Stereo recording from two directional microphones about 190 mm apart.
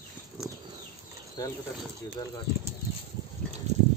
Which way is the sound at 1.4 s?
20° left (ahead or behind).